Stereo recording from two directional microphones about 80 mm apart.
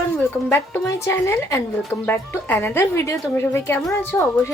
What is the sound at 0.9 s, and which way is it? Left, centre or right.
A woman's voice, left.